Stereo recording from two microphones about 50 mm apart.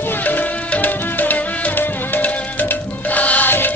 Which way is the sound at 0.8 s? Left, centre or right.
Left.